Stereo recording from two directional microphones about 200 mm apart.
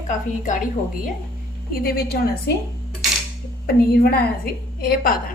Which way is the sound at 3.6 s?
50° left (ahead or behind).